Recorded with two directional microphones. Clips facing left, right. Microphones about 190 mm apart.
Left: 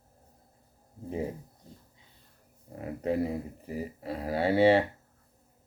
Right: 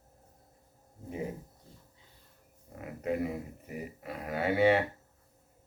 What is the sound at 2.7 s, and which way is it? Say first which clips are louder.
Speech: left 3 dB; 30° left (ahead or behind).